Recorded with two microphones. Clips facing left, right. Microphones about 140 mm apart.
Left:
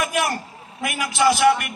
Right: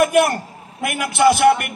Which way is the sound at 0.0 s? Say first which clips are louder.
Right 8 dB; 55° right (ahead or behind).